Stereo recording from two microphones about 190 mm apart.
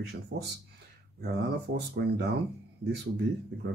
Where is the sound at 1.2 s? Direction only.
60° right (ahead or behind).